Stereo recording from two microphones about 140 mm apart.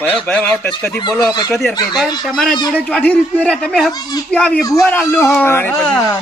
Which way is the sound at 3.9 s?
30° left (ahead or behind).